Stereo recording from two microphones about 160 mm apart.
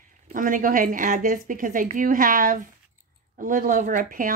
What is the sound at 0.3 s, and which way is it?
A woman's voice, 55° right (ahead or behind).